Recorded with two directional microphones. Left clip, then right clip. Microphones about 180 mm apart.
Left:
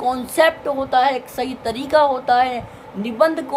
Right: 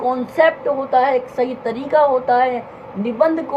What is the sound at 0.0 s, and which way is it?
A woman's voice, 25° left (ahead or behind).